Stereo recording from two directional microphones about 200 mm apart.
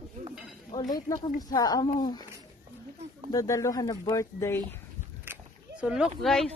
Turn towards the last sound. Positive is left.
turn(degrees=0)  # may be behind; listen again after turning